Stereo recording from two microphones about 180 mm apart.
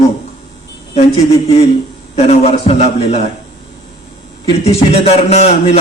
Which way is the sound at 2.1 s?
35° left (ahead or behind).